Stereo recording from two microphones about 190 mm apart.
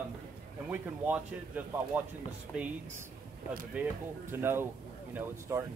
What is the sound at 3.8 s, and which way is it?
Speech, 5° right (ahead or behind).